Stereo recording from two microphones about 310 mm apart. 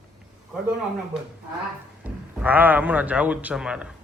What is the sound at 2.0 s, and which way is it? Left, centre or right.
A man's voice, centre.